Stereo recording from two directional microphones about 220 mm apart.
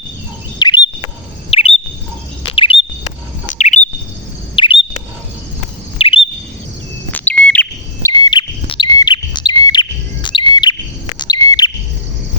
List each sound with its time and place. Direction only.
0.6 s bird: 20° left (ahead or behind)
2.4 s chirp: 25° left (ahead or behind)
3.4 s bird: 35° left (ahead or behind)
4.5 s chirp: 25° left (ahead or behind)
6.0 s chirp: 25° left (ahead or behind)
7.1 s bird: 5° left (ahead or behind)